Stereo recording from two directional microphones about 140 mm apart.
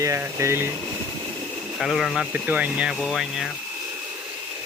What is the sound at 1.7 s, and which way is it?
Speech, centre (ahead or behind).